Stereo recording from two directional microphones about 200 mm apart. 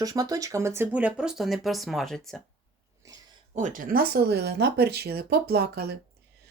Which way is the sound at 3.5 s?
40° right (ahead or behind).